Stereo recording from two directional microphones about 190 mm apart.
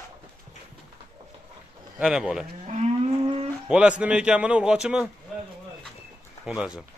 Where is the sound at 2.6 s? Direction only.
35° right (ahead or behind).